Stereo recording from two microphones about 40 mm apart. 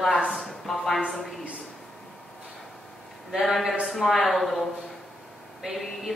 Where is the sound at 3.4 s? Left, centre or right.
Centre.